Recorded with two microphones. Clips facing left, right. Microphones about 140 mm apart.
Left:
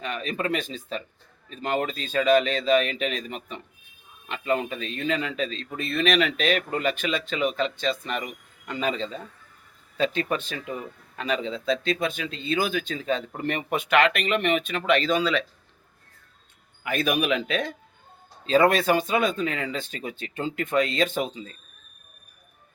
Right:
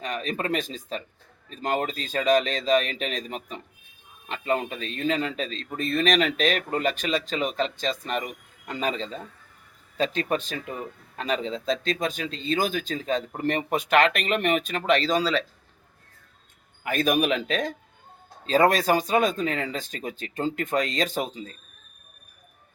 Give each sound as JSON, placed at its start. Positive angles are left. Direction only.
{"t": 0.0, "sound": "speech", "side_deg": -40}
{"t": 16.8, "sound": "speech", "side_deg": -40}